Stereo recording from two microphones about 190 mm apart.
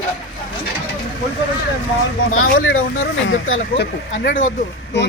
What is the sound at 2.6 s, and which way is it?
Speech, 90° left.